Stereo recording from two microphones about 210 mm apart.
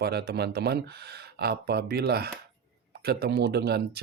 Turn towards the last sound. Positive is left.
turn(degrees=-50)  # may be behind; listen again after turning